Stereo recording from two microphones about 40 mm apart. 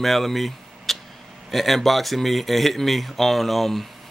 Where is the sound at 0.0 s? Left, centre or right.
Centre.